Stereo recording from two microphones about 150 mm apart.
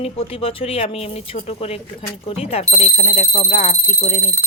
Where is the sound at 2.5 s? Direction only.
50° left (ahead or behind).